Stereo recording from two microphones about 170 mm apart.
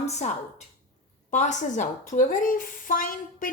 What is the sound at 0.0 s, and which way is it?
A woman's voice, 40° left (ahead or behind).